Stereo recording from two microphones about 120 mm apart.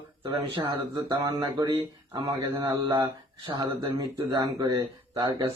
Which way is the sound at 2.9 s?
40° right (ahead or behind).